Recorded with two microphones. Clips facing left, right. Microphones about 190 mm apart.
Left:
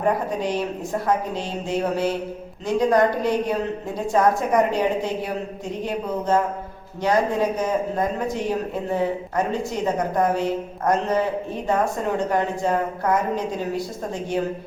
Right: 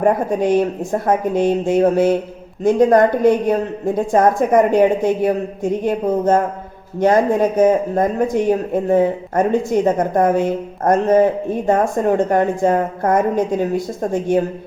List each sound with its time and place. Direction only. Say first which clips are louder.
0.0 s speech: right 6 dB; 50° right (ahead or behind)